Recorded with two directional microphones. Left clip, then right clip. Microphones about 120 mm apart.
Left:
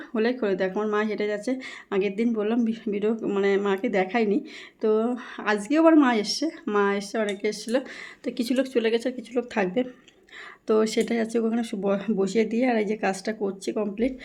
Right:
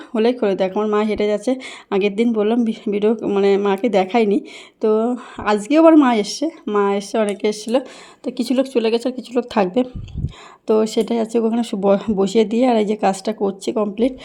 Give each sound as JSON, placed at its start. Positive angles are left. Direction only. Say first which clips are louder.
{"t": 0.1, "sound": "speech", "louder": "right 8 dB", "side_deg": -50}
{"t": 0.7, "sound": "speech", "louder": "right 7 dB", "side_deg": -35}
{"t": 0.9, "sound": "speech", "louder": "right 8 dB", "side_deg": -50}
{"t": 2.3, "sound": "speech", "louder": "right 8 dB", "side_deg": -45}
{"t": 3.2, "sound": "speech", "louder": "right 7 dB", "side_deg": -40}
{"t": 3.4, "sound": "speech", "louder": "right 7 dB", "side_deg": -50}
{"t": 4.8, "sound": "speech", "louder": "right 6 dB", "side_deg": -35}
{"t": 7.2, "sound": "speech", "louder": "right 8 dB", "side_deg": -50}
{"t": 8.2, "sound": "speech", "louder": "right 6 dB", "side_deg": -30}
{"t": 10.7, "sound": "speech", "louder": "right 6 dB", "side_deg": -30}